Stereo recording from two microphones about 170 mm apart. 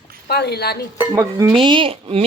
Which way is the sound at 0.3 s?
70° left (ahead or behind).